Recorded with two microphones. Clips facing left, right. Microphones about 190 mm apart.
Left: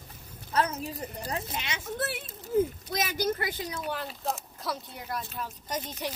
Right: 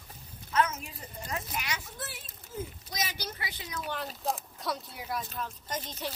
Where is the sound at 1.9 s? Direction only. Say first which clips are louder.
Left 10 dB; 65° left (ahead or behind).